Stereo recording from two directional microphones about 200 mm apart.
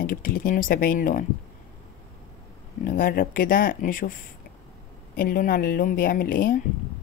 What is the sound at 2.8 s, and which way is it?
Speech, 45° left (ahead or behind).